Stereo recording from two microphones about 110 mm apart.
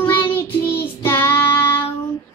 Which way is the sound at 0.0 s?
20° left (ahead or behind).